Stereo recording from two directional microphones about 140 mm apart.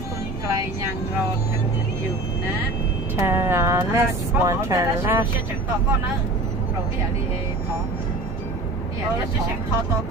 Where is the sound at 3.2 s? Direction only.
20° right (ahead or behind).